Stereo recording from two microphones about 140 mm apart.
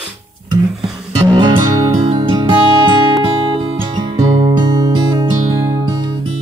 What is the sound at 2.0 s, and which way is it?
Music, 35° right (ahead or behind).